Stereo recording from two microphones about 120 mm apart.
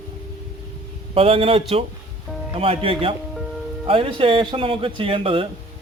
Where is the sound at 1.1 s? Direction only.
50° right (ahead or behind).